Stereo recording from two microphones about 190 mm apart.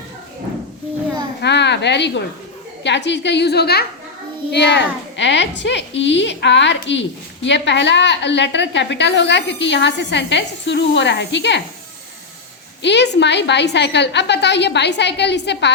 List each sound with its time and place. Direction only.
1.4 s a woman's voice: 65° left (ahead or behind)
12.8 s a woman's voice: 65° left (ahead or behind)